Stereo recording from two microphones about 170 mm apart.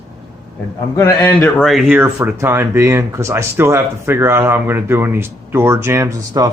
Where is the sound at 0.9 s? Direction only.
15° left (ahead or behind).